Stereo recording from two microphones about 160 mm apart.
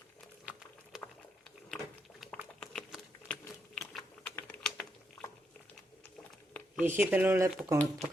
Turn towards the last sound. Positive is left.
turn(degrees=-15)  # may be behind; listen again after turning